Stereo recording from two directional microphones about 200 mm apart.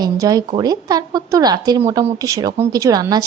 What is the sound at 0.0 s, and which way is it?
Speech, 20° right (ahead or behind).